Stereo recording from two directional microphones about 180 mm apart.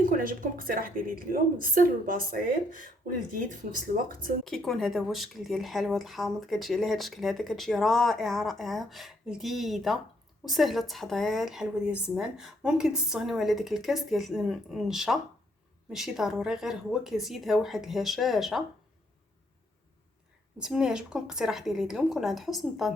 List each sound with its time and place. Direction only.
0.0 s a woman's voice: 50° right (ahead or behind)
3.9 s a woman's voice: 50° right (ahead or behind)
4.4 s speech: centre (ahead or behind)
20.6 s speech: 5° right (ahead or behind)